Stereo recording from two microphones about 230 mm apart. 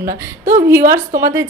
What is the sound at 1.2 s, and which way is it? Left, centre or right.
Speech, centre.